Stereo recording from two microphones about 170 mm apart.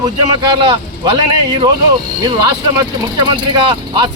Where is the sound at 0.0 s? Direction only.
25° right (ahead or behind).